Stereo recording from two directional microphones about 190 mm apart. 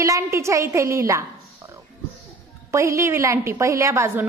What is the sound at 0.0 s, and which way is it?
A woman's voice, 15° right (ahead or behind).